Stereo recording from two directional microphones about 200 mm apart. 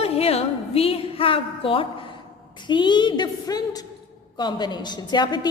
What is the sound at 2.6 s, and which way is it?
A woman's voice, 25° left (ahead or behind).